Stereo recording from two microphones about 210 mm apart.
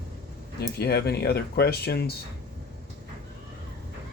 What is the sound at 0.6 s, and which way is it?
Speech, 50° left (ahead or behind).